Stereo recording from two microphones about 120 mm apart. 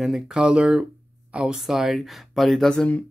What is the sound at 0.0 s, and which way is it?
Speech, 5° right (ahead or behind).